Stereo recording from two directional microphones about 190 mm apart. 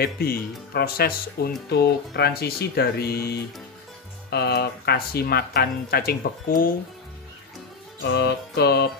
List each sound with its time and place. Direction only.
0.0 s speech: 55° left (ahead or behind)
8.0 s speech: 60° left (ahead or behind)